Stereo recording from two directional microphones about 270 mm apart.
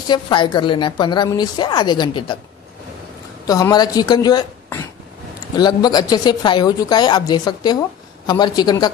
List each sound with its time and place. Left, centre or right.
0.0 s a woman's voice: centre
3.4 s a woman's voice: centre